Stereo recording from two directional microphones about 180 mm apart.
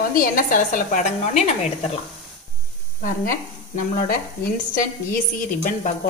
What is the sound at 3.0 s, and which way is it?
Speech, 50° left (ahead or behind).